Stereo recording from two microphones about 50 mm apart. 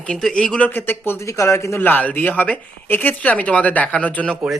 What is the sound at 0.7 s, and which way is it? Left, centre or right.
Speech, left.